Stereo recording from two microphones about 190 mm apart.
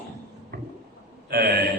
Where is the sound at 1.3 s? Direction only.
55° right (ahead or behind).